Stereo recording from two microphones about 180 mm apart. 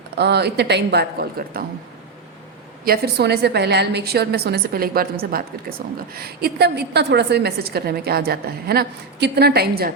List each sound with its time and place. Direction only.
0.2 s a woman's voice: 65° right (ahead or behind)
2.8 s a woman's voice: 60° right (ahead or behind)